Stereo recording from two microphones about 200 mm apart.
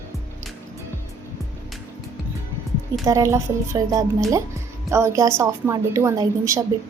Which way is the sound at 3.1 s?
15° right (ahead or behind).